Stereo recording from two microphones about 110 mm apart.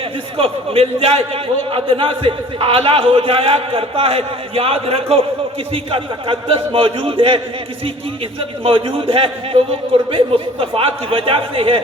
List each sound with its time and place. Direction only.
0.3 s a man's voice: 60° right (ahead or behind)